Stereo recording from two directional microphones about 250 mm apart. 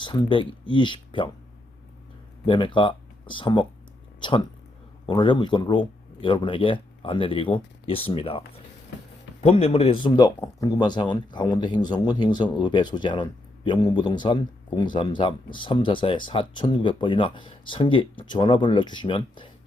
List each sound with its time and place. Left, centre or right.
0.0 s speech: centre
2.5 s speech: centre